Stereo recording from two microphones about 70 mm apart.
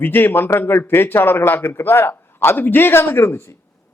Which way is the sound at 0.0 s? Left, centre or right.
Left.